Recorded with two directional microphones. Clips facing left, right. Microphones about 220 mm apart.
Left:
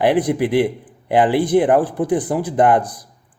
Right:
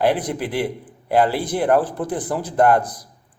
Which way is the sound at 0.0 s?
15° left (ahead or behind).